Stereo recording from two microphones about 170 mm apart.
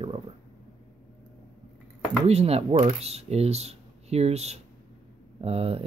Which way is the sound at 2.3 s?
35° right (ahead or behind).